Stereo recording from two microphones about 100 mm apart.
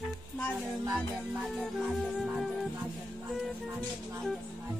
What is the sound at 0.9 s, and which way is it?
Music, 5° right (ahead or behind).